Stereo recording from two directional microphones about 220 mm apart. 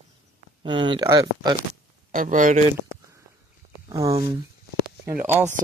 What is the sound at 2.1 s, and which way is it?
Speech, 35° right (ahead or behind).